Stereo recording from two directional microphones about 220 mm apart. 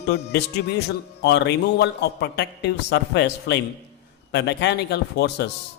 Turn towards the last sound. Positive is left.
turn(degrees=50)  # may be behind; listen again after turning